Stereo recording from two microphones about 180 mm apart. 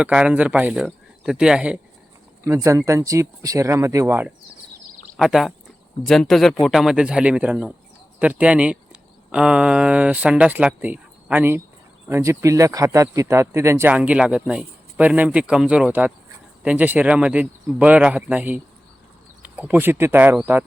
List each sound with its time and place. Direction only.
0.0 s speech: 5° right (ahead or behind)
2.4 s speech: 15° right (ahead or behind)
5.1 s speech: centre (ahead or behind)